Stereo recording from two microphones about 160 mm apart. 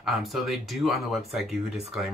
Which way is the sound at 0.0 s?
Centre (ahead or behind).